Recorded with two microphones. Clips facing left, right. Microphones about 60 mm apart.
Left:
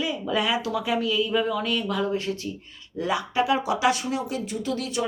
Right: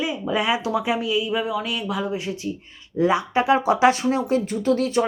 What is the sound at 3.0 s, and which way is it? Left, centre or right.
Speech, right.